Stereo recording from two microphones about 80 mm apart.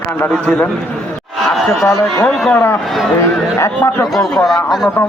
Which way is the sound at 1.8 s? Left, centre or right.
Left.